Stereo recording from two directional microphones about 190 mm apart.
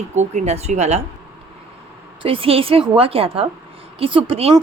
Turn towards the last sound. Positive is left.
turn(degrees=-30)  # may be behind; listen again after turning